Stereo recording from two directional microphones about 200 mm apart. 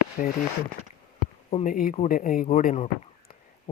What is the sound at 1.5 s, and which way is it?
Speech, 40° left (ahead or behind).